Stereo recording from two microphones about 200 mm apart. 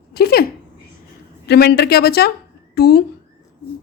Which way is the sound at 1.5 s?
55° left (ahead or behind).